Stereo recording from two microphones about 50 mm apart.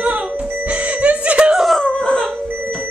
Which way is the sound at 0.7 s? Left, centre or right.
Right.